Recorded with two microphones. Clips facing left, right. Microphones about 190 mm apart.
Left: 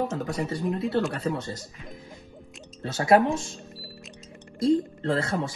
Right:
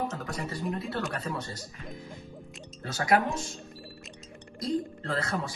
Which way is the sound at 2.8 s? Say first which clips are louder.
Left 5 dB; 25° left (ahead or behind).